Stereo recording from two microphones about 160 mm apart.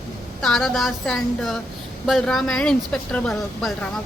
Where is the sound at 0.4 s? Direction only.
Centre (ahead or behind).